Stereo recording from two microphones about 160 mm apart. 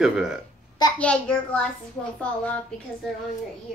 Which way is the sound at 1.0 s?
5° left (ahead or behind).